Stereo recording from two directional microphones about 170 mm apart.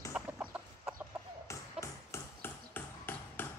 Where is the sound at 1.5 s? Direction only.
15° left (ahead or behind).